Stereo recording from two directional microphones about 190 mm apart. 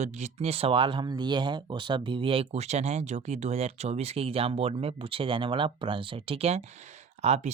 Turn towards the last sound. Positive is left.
turn(degrees=-35)  # may be behind; listen again after turning